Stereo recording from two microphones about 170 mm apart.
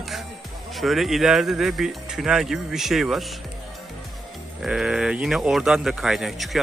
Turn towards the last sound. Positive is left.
turn(degrees=0)  # may be behind; listen again after turning